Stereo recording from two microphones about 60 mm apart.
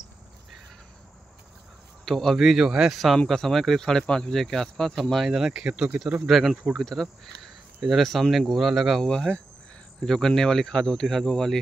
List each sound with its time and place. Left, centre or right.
2.0 s speech: centre
2.4 s speech: centre
2.9 s speech: centre
5.5 s speech: centre
6.2 s speech: centre
9.0 s speech: centre